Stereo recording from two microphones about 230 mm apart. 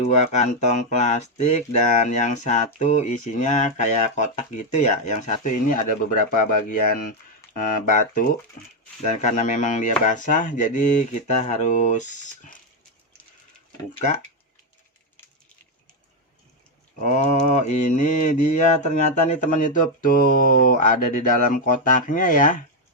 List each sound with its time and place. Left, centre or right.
0.3 s mantra: left
17.0 s mantra: left